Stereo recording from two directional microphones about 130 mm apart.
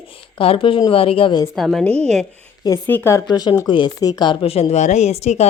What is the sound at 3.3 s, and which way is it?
Speech, 30° left (ahead or behind).